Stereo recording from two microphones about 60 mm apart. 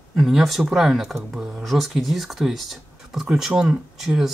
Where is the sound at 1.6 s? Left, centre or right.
Centre.